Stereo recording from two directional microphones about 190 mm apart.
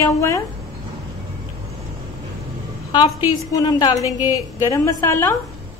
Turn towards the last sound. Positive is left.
turn(degrees=15)  # may be behind; listen again after turning